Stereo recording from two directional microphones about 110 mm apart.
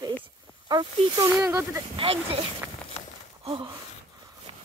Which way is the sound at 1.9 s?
55° right (ahead or behind).